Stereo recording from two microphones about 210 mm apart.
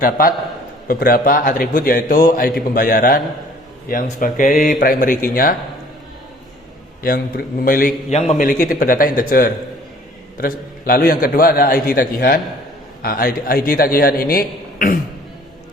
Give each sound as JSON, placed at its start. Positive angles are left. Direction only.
{"t": 0.0, "sound": "a man's voice", "side_deg": 40}
{"t": 7.0, "sound": "a man's voice", "side_deg": 45}